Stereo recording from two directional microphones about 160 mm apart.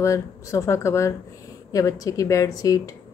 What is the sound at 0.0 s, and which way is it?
A woman's voice, 20° left (ahead or behind).